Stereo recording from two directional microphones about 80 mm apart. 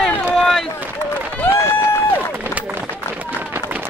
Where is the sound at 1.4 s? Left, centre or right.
Left.